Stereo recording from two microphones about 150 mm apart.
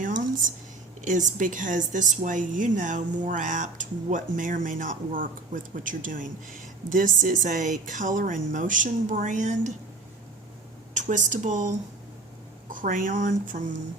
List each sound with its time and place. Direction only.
0.0 s a sound: 60° right (ahead or behind)
1.0 s a woman's voice: 60° right (ahead or behind)
10.9 s speech: 55° right (ahead or behind)
12.7 s a woman's voice: 65° right (ahead or behind)